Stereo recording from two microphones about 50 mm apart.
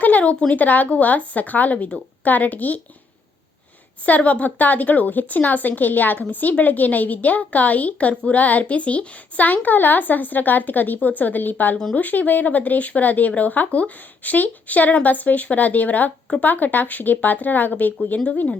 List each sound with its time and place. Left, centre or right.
0.0 s speech: left
4.0 s speech: left
8.4 s speech: left